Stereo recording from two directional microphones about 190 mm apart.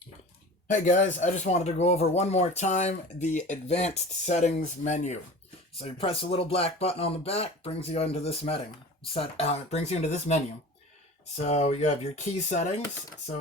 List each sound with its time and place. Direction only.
0.7 s speech: 40° left (ahead or behind)